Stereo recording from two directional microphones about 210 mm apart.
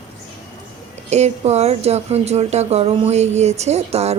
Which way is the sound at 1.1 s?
30° right (ahead or behind).